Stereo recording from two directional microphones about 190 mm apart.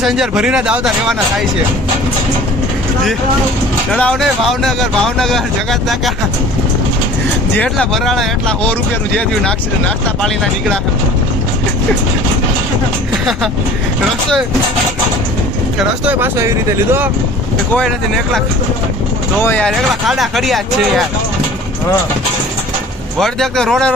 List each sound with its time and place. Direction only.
0.0 s speech: centre (ahead or behind)
3.9 s speech: 5° left (ahead or behind)
7.6 s speech: 5° left (ahead or behind)
16.0 s speech: 15° right (ahead or behind)
17.7 s speech: centre (ahead or behind)
23.2 s speech: centre (ahead or behind)